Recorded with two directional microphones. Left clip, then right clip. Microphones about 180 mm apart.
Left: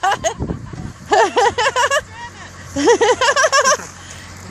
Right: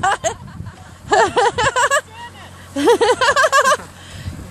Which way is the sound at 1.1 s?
5° left (ahead or behind).